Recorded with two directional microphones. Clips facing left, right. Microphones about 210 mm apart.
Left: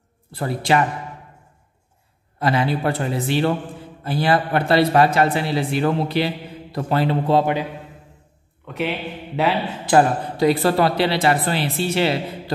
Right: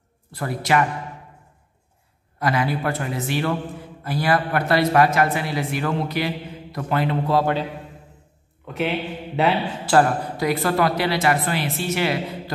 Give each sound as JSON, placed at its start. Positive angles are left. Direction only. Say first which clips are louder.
{"t": 0.3, "sound": "a man's voice", "louder": "left 2 dB", "side_deg": 30}
{"t": 2.3, "sound": "a man's voice", "louder": "left 2 dB", "side_deg": 25}
{"t": 8.6, "sound": "a man's voice", "louder": "right 1 dB", "side_deg": 0}
{"t": 9.9, "sound": "speech", "louder": "left 2 dB", "side_deg": 15}
{"t": 10.3, "sound": "a man's voice", "louder": "left 7 dB", "side_deg": 30}